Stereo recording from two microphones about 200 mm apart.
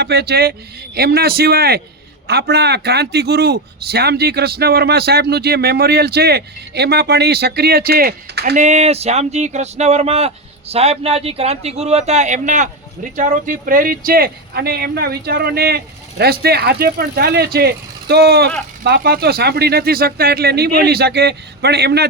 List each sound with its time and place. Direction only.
0.0 s a man's voice: 55° right (ahead or behind)
8.5 s a man's voice: 35° right (ahead or behind); by 22.0 s 55° right (ahead or behind)